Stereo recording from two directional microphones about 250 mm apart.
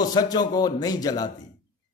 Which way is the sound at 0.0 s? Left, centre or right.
Centre.